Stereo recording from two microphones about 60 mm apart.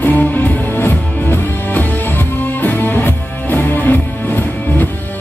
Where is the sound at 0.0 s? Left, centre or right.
Left.